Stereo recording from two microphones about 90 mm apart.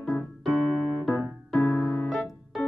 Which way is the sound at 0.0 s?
20° left (ahead or behind).